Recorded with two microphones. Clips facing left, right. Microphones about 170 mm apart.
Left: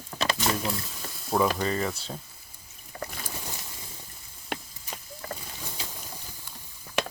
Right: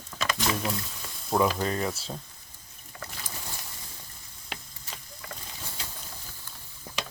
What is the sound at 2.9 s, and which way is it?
Boat, 40° left (ahead or behind).